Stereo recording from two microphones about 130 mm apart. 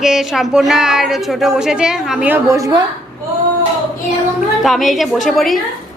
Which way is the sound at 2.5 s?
25° right (ahead or behind).